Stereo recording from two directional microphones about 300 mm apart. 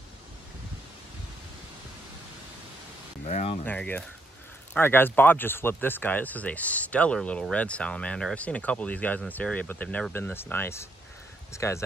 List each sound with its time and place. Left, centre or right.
3.3 s speech: left
3.6 s speech: centre